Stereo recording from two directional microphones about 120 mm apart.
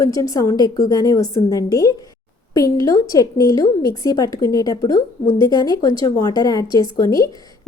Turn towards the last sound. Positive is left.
turn(degrees=30)  # may be behind; listen again after turning